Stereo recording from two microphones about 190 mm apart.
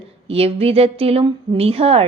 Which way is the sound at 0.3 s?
30° right (ahead or behind).